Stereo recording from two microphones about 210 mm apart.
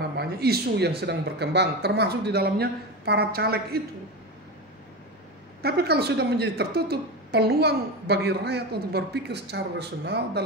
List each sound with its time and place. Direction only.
0.2 s a woman's voice: 50° right (ahead or behind)
5.6 s a woman's voice: 50° right (ahead or behind)